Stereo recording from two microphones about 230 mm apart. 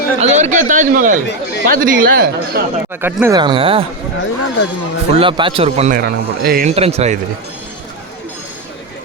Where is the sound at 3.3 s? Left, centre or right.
Right.